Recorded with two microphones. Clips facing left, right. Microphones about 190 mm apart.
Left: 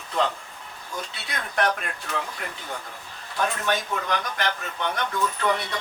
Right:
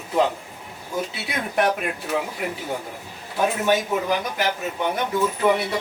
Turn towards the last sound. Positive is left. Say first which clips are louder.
# right 5 dB
turn(degrees=-10)  # may be behind; listen again after turning